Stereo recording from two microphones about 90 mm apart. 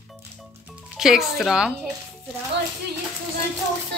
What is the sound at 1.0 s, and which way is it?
Speech, 5° right (ahead or behind).